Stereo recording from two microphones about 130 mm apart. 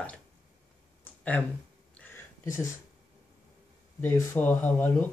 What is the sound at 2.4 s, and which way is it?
Speech, 20° left (ahead or behind).